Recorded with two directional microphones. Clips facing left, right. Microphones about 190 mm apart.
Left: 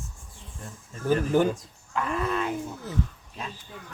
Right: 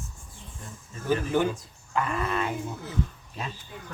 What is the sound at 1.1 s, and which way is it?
Speech, 45° left (ahead or behind).